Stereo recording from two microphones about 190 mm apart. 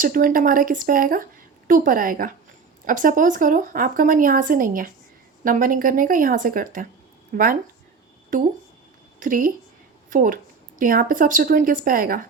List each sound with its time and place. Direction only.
0.0 s a woman's voice: 45° right (ahead or behind)